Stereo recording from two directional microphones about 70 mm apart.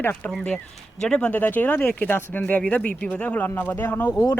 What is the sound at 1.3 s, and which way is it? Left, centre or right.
Speech, left.